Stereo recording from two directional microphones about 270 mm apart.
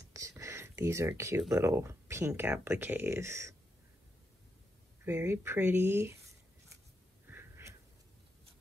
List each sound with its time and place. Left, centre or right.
0.1 s speech: centre
5.0 s speech: centre
7.2 s a sound: centre